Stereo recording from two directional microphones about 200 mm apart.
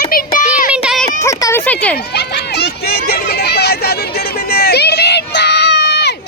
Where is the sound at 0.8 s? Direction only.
Centre (ahead or behind).